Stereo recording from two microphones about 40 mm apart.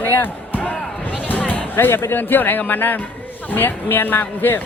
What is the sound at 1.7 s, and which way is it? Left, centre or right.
A man's voice, left.